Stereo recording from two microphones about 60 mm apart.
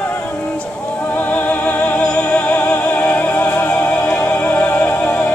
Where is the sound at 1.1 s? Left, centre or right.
Left.